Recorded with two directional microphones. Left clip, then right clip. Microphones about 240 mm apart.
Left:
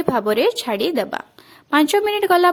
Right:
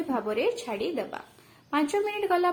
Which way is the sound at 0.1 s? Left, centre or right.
Left.